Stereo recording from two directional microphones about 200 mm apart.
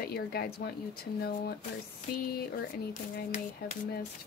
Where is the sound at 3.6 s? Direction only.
50° left (ahead or behind).